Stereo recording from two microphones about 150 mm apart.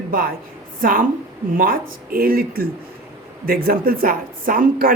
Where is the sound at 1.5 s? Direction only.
75° right (ahead or behind).